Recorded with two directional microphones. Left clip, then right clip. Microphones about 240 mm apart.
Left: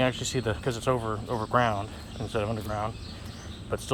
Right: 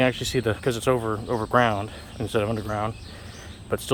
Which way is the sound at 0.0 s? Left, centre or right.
Right.